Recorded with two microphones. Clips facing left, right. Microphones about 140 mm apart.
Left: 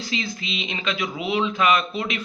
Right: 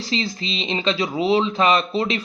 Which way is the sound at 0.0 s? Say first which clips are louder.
Right 4 dB; 35° right (ahead or behind).